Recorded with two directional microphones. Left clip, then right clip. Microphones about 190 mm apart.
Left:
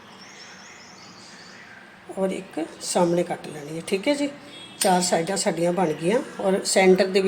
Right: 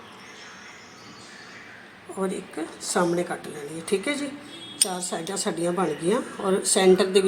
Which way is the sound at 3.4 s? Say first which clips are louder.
Left 1 dB; 35° left (ahead or behind).